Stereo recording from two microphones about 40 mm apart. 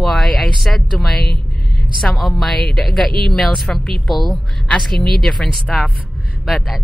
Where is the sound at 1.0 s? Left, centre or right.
Centre.